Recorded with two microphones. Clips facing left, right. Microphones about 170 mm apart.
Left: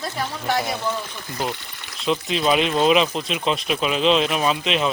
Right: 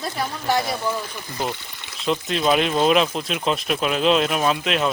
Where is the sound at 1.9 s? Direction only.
Centre (ahead or behind).